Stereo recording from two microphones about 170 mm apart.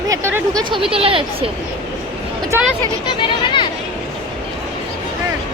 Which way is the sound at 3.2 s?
30° left (ahead or behind).